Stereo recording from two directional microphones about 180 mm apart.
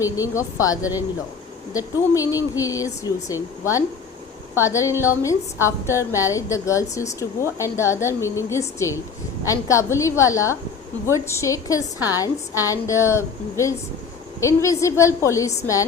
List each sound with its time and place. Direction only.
0.0 s a woman's voice: 15° left (ahead or behind)